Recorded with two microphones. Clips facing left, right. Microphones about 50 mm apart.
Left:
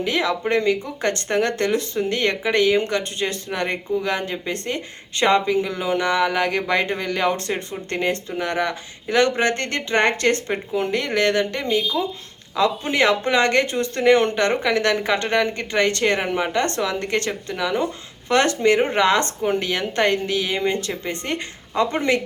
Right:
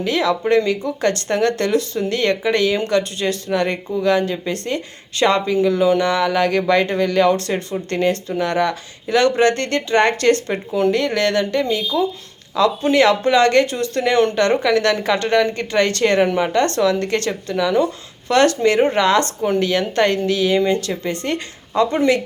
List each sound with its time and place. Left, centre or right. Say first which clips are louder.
0.0 s speech: right 3 dB; left